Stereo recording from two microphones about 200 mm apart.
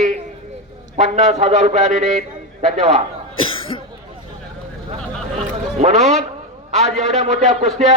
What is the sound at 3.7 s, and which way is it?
Speech, 25° left (ahead or behind).